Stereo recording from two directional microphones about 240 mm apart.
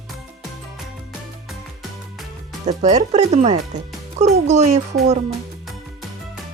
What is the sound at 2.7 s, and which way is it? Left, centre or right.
Speech, right.